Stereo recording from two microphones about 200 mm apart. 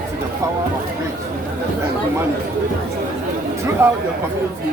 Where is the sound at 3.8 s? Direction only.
15° right (ahead or behind).